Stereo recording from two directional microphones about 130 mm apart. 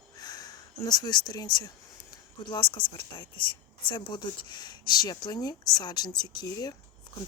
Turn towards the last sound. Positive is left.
turn(degrees=35)  # may be behind; listen again after turning